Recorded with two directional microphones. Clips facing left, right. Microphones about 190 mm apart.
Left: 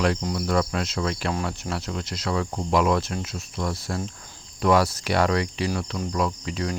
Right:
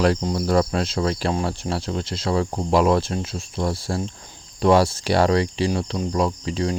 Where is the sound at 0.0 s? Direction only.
35° right (ahead or behind).